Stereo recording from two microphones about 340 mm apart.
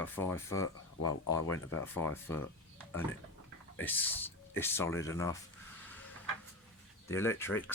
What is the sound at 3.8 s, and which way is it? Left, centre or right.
Speech, centre.